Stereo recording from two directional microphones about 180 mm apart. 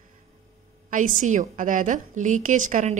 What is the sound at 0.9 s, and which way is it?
Speech, 45° right (ahead or behind).